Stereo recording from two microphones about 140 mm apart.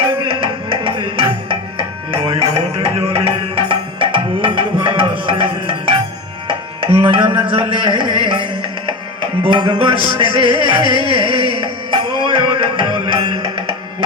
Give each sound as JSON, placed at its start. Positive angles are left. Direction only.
{"t": 0.0, "sound": "music", "side_deg": -40}
{"t": 2.0, "sound": "music", "side_deg": -30}
{"t": 2.7, "sound": "music", "side_deg": -45}
{"t": 7.1, "sound": "speech", "side_deg": -35}
{"t": 7.7, "sound": "music", "side_deg": -35}